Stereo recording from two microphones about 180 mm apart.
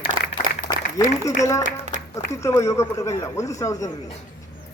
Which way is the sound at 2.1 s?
15° left (ahead or behind).